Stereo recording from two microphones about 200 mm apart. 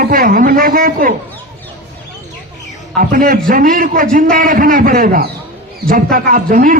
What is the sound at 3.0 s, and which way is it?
A man's voice, 45° right (ahead or behind).